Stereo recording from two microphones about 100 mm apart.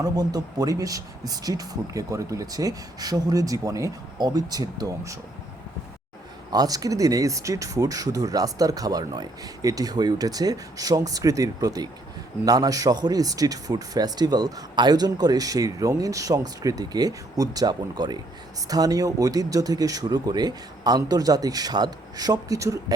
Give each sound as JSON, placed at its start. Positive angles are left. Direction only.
{"t": 0.0, "sound": "speech", "side_deg": -40}
{"t": 6.5, "sound": "speech", "side_deg": -40}